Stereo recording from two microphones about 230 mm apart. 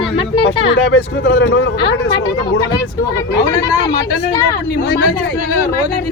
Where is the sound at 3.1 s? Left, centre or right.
Centre.